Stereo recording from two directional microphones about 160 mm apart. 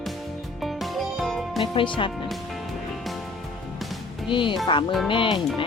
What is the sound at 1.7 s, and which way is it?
Speech, 30° left (ahead or behind).